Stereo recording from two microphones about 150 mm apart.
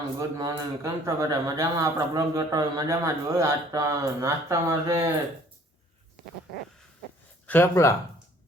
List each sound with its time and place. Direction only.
0.2 s a man's voice: 20° right (ahead or behind)
7.4 s speech: 15° left (ahead or behind)